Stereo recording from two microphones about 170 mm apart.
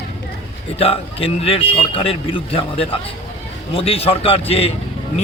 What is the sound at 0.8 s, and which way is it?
Speech, 35° left (ahead or behind).